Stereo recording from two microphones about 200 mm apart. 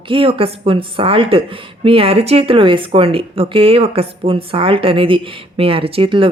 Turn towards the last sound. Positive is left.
turn(degrees=-25)  # may be behind; listen again after turning